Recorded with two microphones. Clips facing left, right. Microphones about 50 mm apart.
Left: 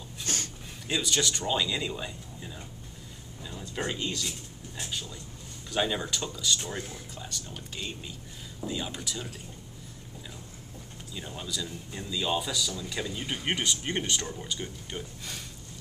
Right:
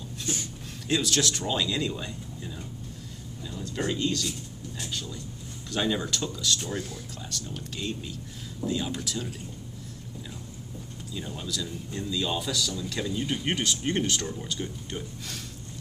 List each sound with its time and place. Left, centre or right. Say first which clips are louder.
0.3 s a sound: right 1 dB; left
0.8 s speech: right 3 dB; centre
4.3 s a sound: right 4 dB; left
5.7 s speech: right 1 dB; centre
6.6 s speech: right 3 dB; left
7.2 s speech: right 3 dB; centre
11.1 s speech: right 2 dB; centre